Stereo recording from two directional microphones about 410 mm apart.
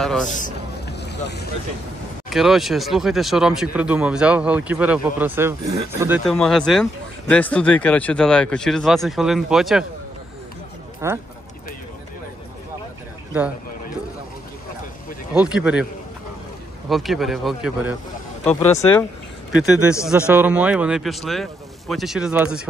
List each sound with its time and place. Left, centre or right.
0.0 s a sound: centre
0.3 s boat: left
2.2 s speech: centre
11.0 s speech: centre
15.3 s speech: centre
16.9 s speech: centre